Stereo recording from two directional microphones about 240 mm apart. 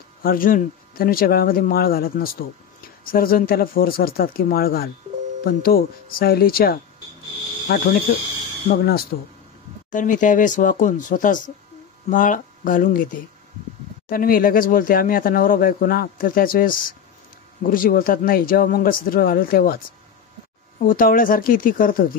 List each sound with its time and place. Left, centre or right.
0.2 s speech: left
20.8 s speech: left